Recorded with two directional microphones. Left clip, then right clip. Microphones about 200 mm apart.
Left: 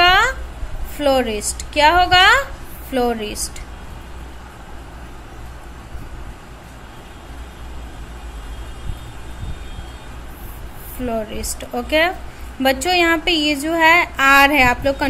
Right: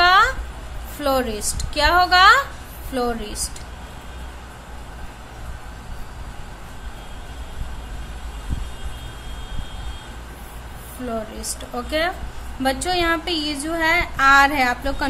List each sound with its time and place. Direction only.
0.0 s a sound: 15° left (ahead or behind)
0.9 s speech: 10° left (ahead or behind)
11.7 s speech: 15° left (ahead or behind)